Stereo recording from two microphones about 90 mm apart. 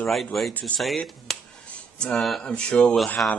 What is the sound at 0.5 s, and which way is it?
Speech, 15° left (ahead or behind).